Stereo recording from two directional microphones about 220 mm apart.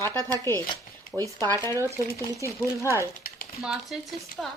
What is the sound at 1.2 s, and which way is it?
Speech, 10° left (ahead or behind).